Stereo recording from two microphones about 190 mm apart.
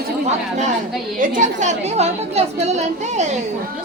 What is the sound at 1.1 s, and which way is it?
A woman's voice, 45° right (ahead or behind).